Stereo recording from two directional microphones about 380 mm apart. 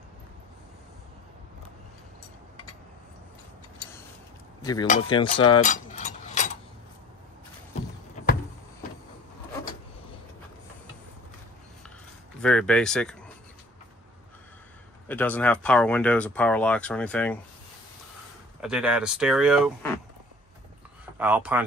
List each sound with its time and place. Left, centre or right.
4.6 s cutlery: centre
12.4 s speech: centre
15.0 s speech: centre
18.6 s speech: centre
21.0 s speech: centre